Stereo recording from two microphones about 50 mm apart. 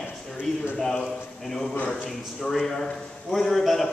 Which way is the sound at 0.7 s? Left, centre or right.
Centre.